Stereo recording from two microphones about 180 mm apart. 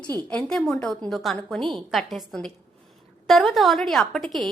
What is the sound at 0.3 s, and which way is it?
A woman's voice, 5° left (ahead or behind).